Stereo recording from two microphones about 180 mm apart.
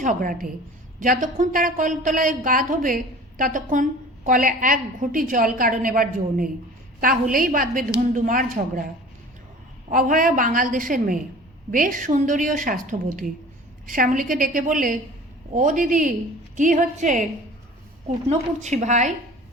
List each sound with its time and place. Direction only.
0.0 s speech: 50° right (ahead or behind)
9.9 s speech: 50° right (ahead or behind)
18.3 s a woman's voice: 40° right (ahead or behind)